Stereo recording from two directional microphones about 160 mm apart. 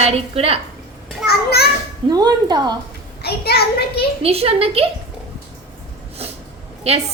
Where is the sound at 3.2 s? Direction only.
85° left.